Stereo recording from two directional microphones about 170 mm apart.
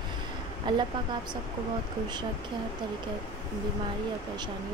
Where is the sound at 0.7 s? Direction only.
25° right (ahead or behind).